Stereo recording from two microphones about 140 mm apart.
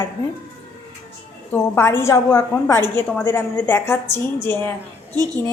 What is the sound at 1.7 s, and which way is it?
A woman's voice, 15° left (ahead or behind).